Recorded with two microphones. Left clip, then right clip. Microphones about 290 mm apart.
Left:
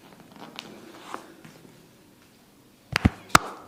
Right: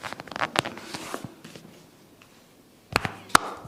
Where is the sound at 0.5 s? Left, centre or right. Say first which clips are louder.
Right 15 dB; right.